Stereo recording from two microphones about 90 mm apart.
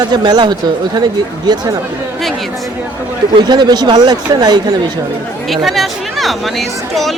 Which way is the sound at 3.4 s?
55° right (ahead or behind).